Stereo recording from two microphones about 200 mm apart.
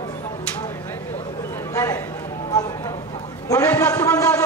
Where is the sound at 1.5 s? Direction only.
15° left (ahead or behind).